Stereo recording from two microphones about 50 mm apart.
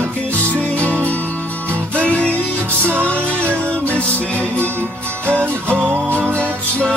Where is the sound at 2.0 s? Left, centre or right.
Left.